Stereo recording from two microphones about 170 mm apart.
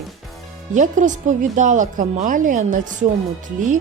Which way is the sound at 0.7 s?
45° right (ahead or behind).